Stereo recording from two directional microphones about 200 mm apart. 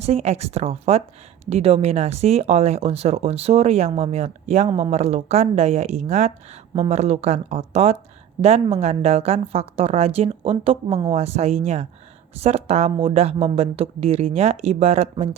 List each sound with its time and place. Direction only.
0.0 s speech: 30° right (ahead or behind)